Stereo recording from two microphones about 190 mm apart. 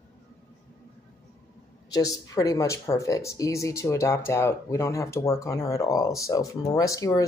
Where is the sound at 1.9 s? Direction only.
20° left (ahead or behind).